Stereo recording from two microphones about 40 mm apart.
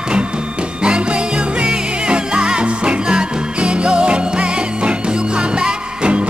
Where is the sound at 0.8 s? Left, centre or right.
Right.